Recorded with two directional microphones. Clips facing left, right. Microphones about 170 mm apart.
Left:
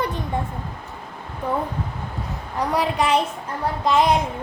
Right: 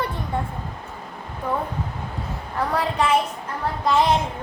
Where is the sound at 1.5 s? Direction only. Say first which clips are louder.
Left 1 dB; 15° left (ahead or behind).